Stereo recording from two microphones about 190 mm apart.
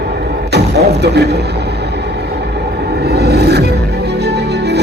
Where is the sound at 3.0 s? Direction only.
60° right (ahead or behind).